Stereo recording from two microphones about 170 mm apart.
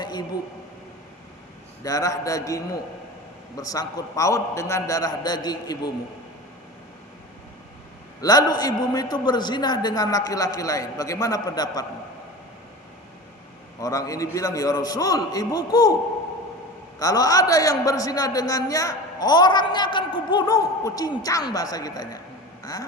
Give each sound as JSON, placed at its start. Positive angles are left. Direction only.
{"t": 0.0, "sound": "a sound", "side_deg": 25}
{"t": 1.8, "sound": "a man's voice", "side_deg": 20}
{"t": 8.2, "sound": "a man's voice", "side_deg": 20}
{"t": 13.7, "sound": "a man's voice", "side_deg": 20}
{"t": 17.0, "sound": "a man's voice", "side_deg": 20}